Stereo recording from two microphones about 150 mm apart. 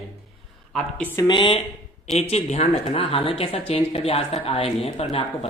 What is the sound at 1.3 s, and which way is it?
Speech, 35° left (ahead or behind).